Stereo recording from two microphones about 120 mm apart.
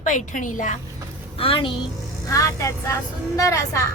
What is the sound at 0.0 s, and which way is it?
Speech, 90° left.